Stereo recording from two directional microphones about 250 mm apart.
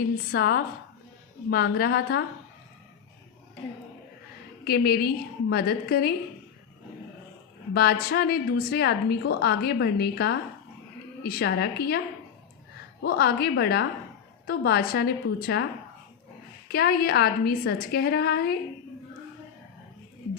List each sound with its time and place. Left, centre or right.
0.3 s a woman's voice: left
4.6 s a woman's voice: left
7.7 s a woman's voice: left
16.6 s a woman's voice: left